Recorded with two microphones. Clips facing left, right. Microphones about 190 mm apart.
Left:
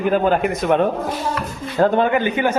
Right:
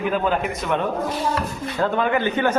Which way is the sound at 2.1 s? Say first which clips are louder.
Left 2 dB; 10° left (ahead or behind).